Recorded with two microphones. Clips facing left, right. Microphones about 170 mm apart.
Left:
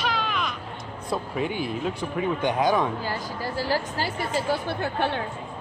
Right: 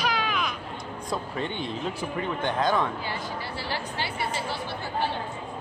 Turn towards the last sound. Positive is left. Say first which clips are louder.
# left 3 dB
turn(degrees=60)  # may be behind; listen again after turning